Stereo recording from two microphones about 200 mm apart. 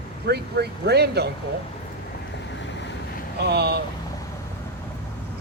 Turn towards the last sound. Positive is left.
turn(degrees=-55)  # may be behind; listen again after turning